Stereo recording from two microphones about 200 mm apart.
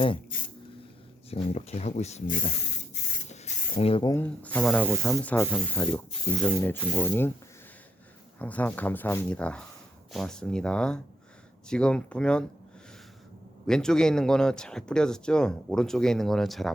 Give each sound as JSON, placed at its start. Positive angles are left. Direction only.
{"t": 1.3, "sound": "speech", "side_deg": 35}
{"t": 3.2, "sound": "spray", "side_deg": 30}
{"t": 4.1, "sound": "speech", "side_deg": 10}
{"t": 4.8, "sound": "speech", "side_deg": -10}
{"t": 5.2, "sound": "speech", "side_deg": 5}
{"t": 8.4, "sound": "speech", "side_deg": 10}
{"t": 13.7, "sound": "speech", "side_deg": 5}